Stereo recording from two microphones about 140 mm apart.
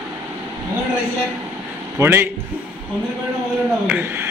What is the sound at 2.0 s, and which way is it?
Speech, 15° right (ahead or behind).